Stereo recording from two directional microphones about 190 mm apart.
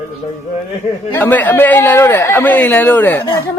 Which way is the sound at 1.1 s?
10° left (ahead or behind).